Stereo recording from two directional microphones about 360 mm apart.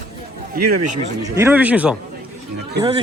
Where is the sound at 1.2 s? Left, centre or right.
Centre.